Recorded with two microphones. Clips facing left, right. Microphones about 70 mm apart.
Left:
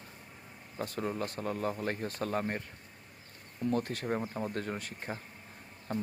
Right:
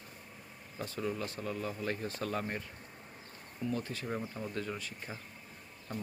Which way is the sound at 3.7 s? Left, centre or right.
Left.